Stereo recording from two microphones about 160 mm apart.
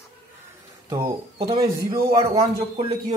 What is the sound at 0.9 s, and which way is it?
Speech, 20° right (ahead or behind).